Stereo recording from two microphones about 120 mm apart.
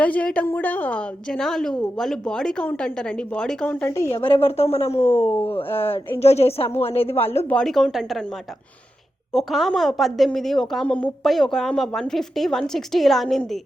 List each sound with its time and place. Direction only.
0.0 s a woman's voice: 10° left (ahead or behind)
4.4 s a woman's voice: 55° left (ahead or behind)
7.3 s a woman's voice: 10° left (ahead or behind)
9.3 s a woman's voice: centre (ahead or behind)